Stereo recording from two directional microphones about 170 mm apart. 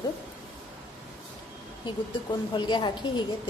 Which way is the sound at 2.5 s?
25° left (ahead or behind).